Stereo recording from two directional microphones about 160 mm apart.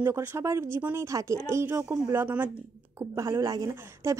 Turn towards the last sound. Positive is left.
turn(degrees=-20)  # may be behind; listen again after turning